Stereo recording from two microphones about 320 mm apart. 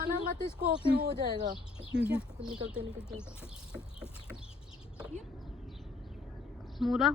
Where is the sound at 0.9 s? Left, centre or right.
Right.